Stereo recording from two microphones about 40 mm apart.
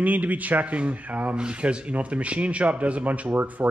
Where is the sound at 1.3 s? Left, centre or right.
Right.